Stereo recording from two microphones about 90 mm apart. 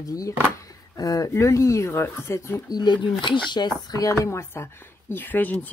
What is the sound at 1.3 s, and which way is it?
Speech, 30° left (ahead or behind).